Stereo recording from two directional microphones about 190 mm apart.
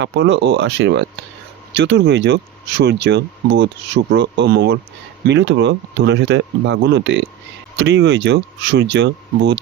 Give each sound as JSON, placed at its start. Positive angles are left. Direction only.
{"t": 0.0, "sound": "speech", "side_deg": -70}
{"t": 5.3, "sound": "speech", "side_deg": -70}